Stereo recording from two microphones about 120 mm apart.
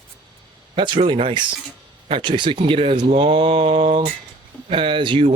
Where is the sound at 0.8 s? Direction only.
40° right (ahead or behind).